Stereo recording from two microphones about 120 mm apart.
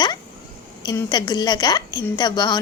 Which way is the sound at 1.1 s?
35° left (ahead or behind).